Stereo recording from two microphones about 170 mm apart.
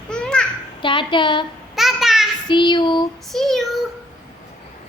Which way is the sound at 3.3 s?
Centre (ahead or behind).